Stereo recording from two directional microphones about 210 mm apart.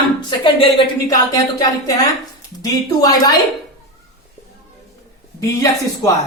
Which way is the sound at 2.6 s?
15° left (ahead or behind).